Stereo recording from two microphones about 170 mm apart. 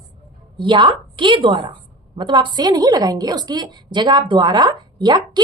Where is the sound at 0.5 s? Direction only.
30° right (ahead or behind).